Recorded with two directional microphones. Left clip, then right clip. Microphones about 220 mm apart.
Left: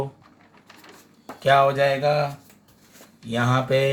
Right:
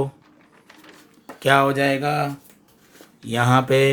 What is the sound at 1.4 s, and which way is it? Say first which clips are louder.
Speech: even; 50° right (ahead or behind).